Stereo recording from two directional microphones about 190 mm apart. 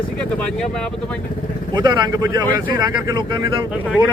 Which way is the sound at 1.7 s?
20° right (ahead or behind).